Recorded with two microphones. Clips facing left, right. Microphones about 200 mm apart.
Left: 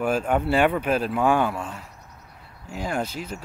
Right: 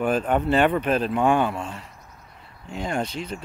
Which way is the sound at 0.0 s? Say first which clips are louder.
Right 1 dB; 10° left (ahead or behind).